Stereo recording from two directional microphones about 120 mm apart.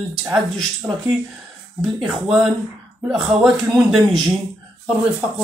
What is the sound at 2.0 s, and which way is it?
Speech, centre (ahead or behind).